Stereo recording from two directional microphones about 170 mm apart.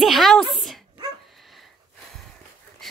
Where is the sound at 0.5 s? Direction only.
Centre (ahead or behind).